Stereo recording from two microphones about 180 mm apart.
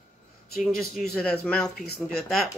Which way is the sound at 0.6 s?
Centre (ahead or behind).